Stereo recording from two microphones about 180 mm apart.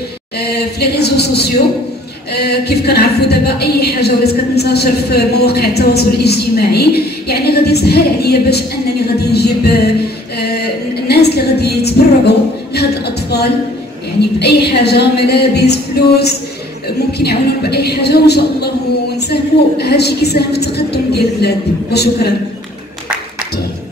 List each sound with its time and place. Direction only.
0.4 s a woman's voice: 65° left (ahead or behind)
10.4 s music: 60° left (ahead or behind)
12.7 s a sound: 65° left (ahead or behind)
14.4 s a woman's voice: 65° left (ahead or behind)
17.2 s a woman's voice: 60° left (ahead or behind)